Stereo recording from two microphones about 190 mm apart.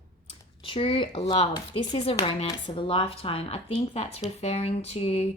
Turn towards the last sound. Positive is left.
turn(degrees=30)  # may be behind; listen again after turning